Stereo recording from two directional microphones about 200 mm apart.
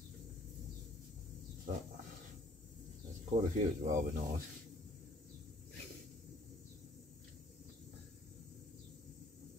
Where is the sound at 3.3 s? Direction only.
35° right (ahead or behind).